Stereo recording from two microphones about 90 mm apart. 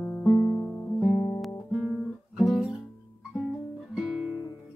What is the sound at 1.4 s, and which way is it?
Guitar, centre (ahead or behind).